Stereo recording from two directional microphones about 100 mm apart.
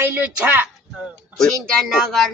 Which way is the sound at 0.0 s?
20° right (ahead or behind).